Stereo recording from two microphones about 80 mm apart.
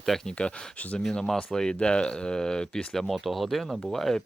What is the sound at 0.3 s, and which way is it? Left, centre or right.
Speech, centre.